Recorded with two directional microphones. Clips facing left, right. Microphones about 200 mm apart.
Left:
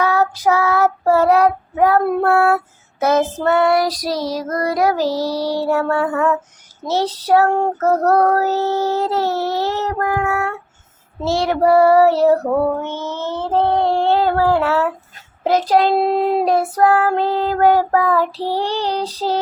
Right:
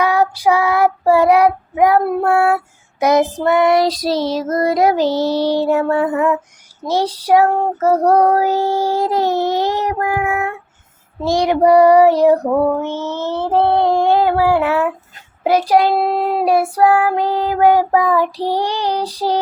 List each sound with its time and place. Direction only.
0.0 s child singing: 15° right (ahead or behind)